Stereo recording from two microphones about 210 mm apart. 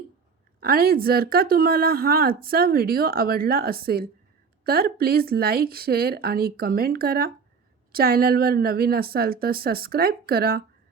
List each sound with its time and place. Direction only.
0.6 s speech: 45° right (ahead or behind)